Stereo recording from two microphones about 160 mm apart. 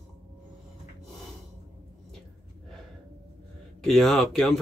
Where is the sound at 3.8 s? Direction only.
Centre (ahead or behind).